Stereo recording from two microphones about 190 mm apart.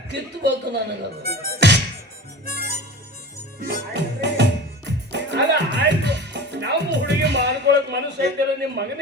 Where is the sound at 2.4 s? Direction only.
50° right (ahead or behind).